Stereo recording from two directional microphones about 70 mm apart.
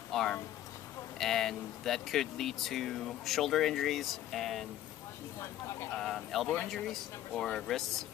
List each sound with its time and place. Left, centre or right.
0.1 s speech: centre
5.4 s speech: left
5.9 s speech: centre